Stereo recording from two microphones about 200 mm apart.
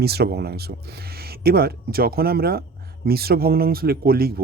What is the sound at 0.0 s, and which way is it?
Speech, 55° right (ahead or behind).